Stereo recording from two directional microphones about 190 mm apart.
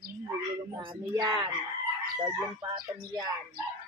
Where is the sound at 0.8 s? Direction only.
25° right (ahead or behind).